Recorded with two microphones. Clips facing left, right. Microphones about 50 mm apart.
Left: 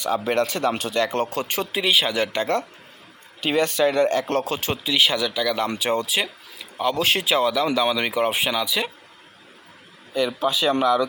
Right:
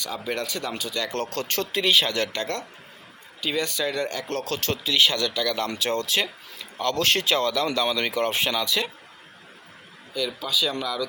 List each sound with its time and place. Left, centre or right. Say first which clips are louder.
0.0 s speech: left 8 dB; left
0.7 s speech: left 6 dB; left
0.9 s speech: left 5 dB; left
3.4 s speech: left 6 dB; left; by 8.9 s centre
10.2 s speech: left 5 dB; left